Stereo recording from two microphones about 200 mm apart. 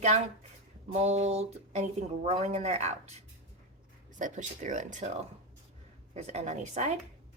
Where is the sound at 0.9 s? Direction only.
35° right (ahead or behind).